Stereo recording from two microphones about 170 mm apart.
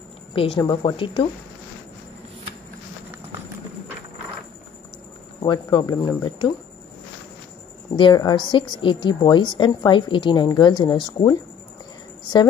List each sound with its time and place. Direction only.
0.3 s a woman's voice: 30° left (ahead or behind)
5.4 s a woman's voice: 30° left (ahead or behind)
7.9 s a woman's voice: 25° left (ahead or behind)